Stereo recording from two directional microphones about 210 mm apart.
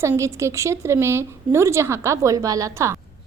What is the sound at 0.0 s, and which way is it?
A woman's voice, 15° right (ahead or behind).